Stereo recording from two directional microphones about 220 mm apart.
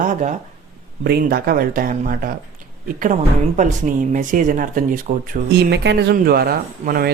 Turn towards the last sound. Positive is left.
turn(degrees=-45)  # may be behind; listen again after turning